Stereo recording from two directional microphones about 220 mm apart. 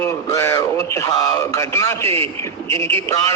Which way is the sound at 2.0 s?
25° right (ahead or behind).